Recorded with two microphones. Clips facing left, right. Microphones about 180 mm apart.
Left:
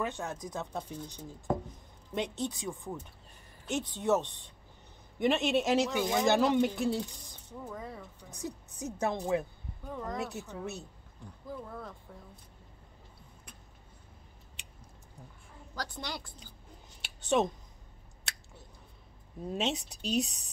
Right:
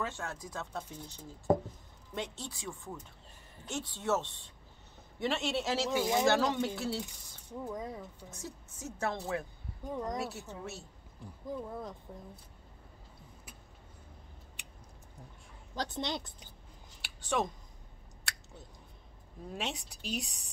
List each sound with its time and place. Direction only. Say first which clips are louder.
0.0 s speech: left 3 dB; 15° left (ahead or behind)
5.9 s speech: even; 15° right (ahead or behind)
6.2 s speech: left 3 dB; 15° left (ahead or behind)
7.6 s speech: right 3 dB; 15° right (ahead or behind)
8.3 s speech: left 5 dB; 15° left (ahead or behind)
9.8 s speech: right 1 dB; 15° right (ahead or behind)
10.5 s speech: left 4 dB; 15° left (ahead or behind)
11.4 s speech: right 3 dB; 20° right (ahead or behind)
14.6 s a sound: right 1 dB; 20° left (ahead or behind)
15.7 s a woman's voice: right 4 dB; 20° right (ahead or behind)
17.0 s a sound: left 5 dB; 20° left (ahead or behind)
18.3 s scissors: right 1 dB; 20° left (ahead or behind)
19.5 s a woman's voice: left 6 dB; 20° left (ahead or behind)